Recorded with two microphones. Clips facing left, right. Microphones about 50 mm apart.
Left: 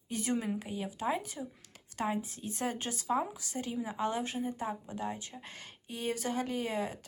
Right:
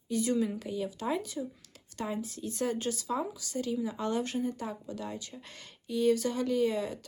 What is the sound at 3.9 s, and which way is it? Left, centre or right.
Speech, centre.